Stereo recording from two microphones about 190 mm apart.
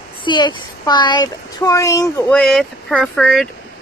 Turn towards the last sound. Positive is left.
turn(degrees=0)  # may be behind; listen again after turning